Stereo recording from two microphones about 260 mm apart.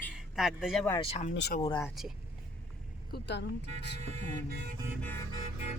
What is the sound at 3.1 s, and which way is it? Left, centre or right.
Speech, left.